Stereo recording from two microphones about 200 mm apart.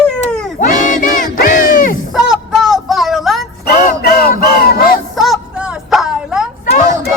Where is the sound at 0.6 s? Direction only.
40° left (ahead or behind).